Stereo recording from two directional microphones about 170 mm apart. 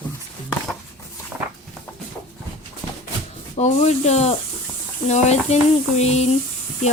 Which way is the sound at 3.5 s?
40° left (ahead or behind).